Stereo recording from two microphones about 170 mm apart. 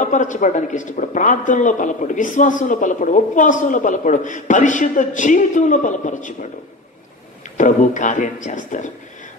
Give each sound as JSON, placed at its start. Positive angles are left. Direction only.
{"t": 0.0, "sound": "a man's voice", "side_deg": 45}
{"t": 7.5, "sound": "a man's voice", "side_deg": 45}